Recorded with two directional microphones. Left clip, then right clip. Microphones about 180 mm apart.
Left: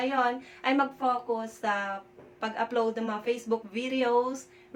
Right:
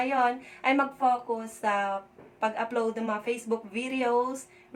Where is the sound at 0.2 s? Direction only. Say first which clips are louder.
Right 1 dB; 15° right (ahead or behind).